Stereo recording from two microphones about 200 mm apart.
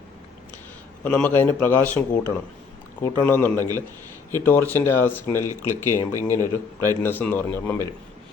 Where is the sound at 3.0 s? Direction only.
10° left (ahead or behind).